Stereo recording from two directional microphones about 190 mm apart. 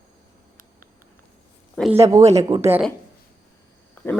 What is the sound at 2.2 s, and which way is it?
Speech, 35° right (ahead or behind).